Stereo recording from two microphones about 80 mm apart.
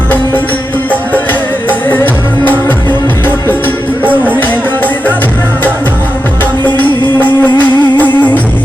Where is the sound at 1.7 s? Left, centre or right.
Left.